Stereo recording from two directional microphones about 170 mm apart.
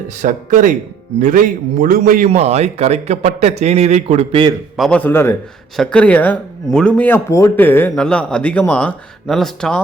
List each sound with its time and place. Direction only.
0.2 s a man's voice: 50° right (ahead or behind)
2.3 s speech: 40° right (ahead or behind)
4.8 s speech: 5° left (ahead or behind)